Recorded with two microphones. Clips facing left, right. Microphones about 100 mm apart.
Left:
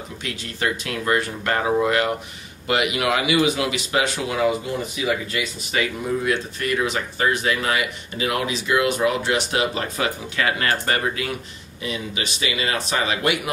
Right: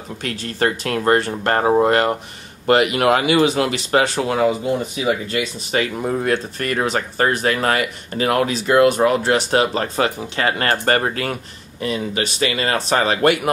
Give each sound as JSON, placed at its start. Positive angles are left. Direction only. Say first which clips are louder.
{"t": 0.2, "sound": "speech", "louder": "right 6 dB", "side_deg": -45}